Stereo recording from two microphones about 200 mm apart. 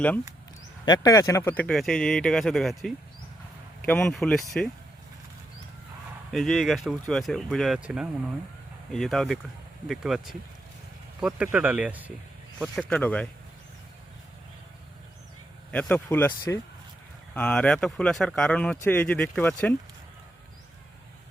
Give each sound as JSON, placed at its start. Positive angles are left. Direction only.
{"t": 0.9, "sound": "speech", "side_deg": 15}
{"t": 6.3, "sound": "speech", "side_deg": 0}
{"t": 12.9, "sound": "speech", "side_deg": 5}
{"t": 15.7, "sound": "speech", "side_deg": 5}